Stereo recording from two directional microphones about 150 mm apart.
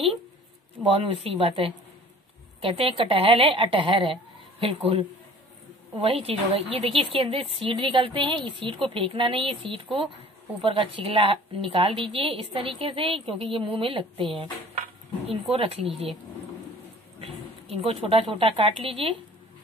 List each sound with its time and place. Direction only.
0.8 s a woman's voice: 40° right (ahead or behind)
17.2 s speech: 40° right (ahead or behind)